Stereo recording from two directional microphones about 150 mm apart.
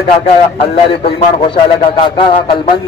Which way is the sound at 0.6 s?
35° left (ahead or behind).